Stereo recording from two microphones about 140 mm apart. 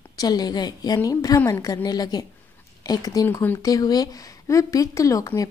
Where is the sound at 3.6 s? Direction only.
25° left (ahead or behind).